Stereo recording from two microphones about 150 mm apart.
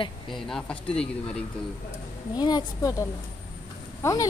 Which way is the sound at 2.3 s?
30° left (ahead or behind).